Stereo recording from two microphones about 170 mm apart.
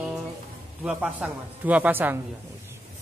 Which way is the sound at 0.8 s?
5° right (ahead or behind).